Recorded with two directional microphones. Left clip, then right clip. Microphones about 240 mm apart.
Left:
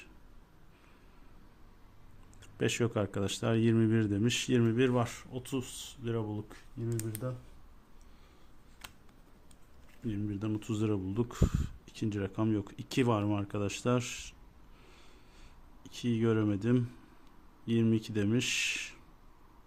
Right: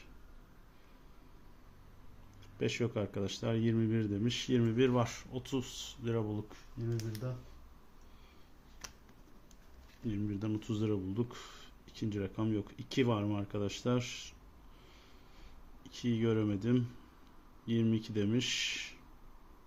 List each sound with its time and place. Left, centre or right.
2.4 s speech: left; by 6.4 s centre
10.1 s speech: centre
15.8 s speech: centre